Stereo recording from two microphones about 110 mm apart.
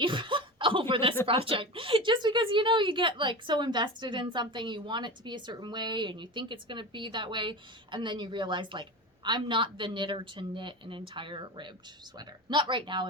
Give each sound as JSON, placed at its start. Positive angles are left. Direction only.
{"t": 0.0, "sound": "snicker", "side_deg": -50}
{"t": 1.3, "sound": "a woman's voice", "side_deg": -55}